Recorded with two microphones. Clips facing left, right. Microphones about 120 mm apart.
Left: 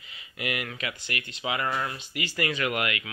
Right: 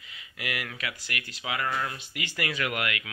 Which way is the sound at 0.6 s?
Centre (ahead or behind).